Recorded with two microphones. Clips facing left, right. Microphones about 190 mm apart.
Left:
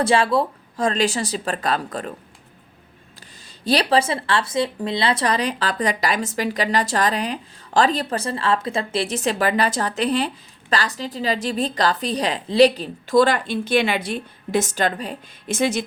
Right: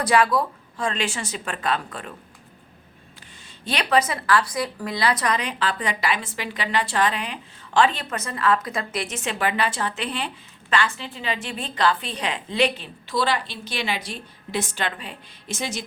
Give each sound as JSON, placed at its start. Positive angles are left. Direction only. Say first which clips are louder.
{"t": 0.0, "sound": "speech", "louder": "left 2 dB", "side_deg": 25}
{"t": 0.8, "sound": "speech", "louder": "left 6 dB", "side_deg": 40}
{"t": 3.4, "sound": "speech", "louder": "left 8 dB", "side_deg": 35}
{"t": 15.5, "sound": "a woman's voice", "louder": "left 9 dB", "side_deg": 55}